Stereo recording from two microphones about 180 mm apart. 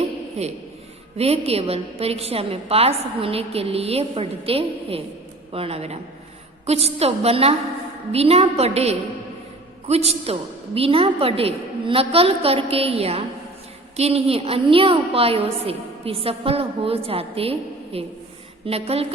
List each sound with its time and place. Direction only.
0.4 s a woman's voice: 35° right (ahead or behind)